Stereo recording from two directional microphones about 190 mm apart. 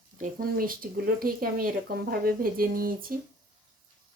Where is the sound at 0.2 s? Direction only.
50° right (ahead or behind).